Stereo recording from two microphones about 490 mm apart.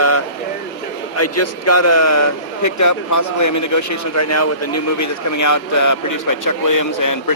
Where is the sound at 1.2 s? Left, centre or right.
Left.